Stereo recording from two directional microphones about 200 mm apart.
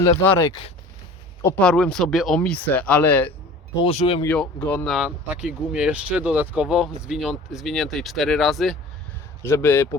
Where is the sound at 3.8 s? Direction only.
30° left (ahead or behind).